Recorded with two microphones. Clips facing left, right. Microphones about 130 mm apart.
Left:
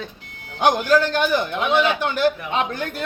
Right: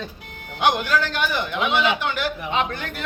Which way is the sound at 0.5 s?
40° left (ahead or behind).